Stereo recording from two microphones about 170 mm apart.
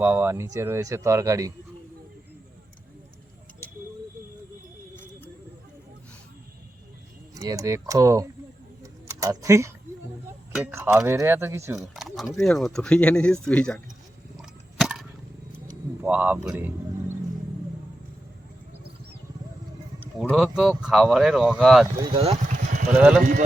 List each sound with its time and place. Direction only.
0.0 s speech: 15° right (ahead or behind)
7.3 s speech: 20° right (ahead or behind)
8.8 s a sound: 20° right (ahead or behind)
10.8 s speech: 15° right (ahead or behind)
11.8 s speech: centre (ahead or behind)
14.3 s a sound: centre (ahead or behind)
16.0 s speech: 10° right (ahead or behind)
20.3 s speech: centre (ahead or behind)
22.1 s speech: 35° right (ahead or behind)
22.9 s speech: 5° right (ahead or behind)